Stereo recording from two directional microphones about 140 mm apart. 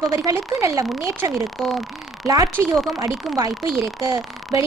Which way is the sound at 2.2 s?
25° right (ahead or behind).